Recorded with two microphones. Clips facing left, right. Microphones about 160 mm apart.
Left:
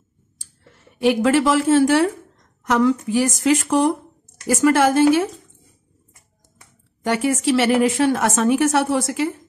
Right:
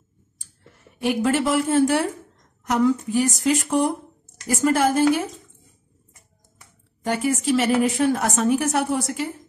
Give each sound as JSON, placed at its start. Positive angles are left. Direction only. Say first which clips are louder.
{"t": 1.0, "sound": "a woman's voice", "louder": "left 5 dB", "side_deg": 90}
{"t": 7.1, "sound": "a woman's voice", "louder": "left 3 dB", "side_deg": 80}